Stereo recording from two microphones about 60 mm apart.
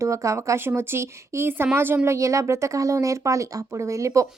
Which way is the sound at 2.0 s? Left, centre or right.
Right.